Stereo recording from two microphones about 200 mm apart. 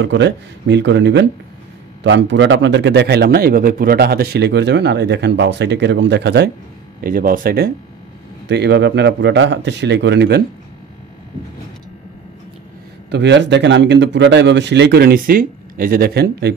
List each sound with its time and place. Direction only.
0.0 s a man's voice: 60° right (ahead or behind)
7.0 s speech: 45° right (ahead or behind)
8.5 s a man's voice: 60° right (ahead or behind)
13.1 s a man's voice: 60° right (ahead or behind)